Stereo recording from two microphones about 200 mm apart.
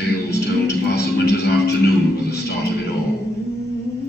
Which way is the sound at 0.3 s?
55° left (ahead or behind).